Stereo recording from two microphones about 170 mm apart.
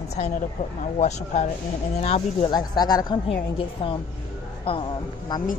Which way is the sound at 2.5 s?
25° left (ahead or behind).